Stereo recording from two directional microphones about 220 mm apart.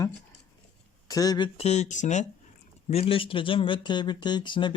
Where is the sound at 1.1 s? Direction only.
15° left (ahead or behind).